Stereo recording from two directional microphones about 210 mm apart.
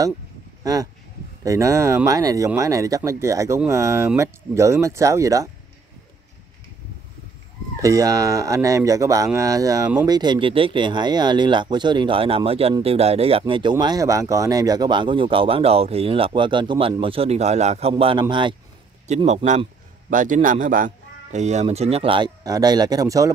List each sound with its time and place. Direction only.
1.4 s speech: 15° right (ahead or behind)
7.8 s a man's voice: 15° right (ahead or behind)